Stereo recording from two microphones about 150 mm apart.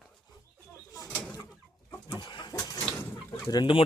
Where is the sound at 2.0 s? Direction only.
30° left (ahead or behind).